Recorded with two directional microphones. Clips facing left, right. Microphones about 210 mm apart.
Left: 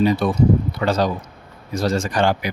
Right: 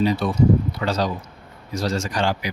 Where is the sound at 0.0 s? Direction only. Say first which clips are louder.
Left 2 dB; 50° left (ahead or behind).